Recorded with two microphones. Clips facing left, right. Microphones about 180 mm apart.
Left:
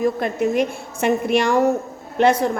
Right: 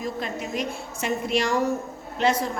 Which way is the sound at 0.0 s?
55° left (ahead or behind).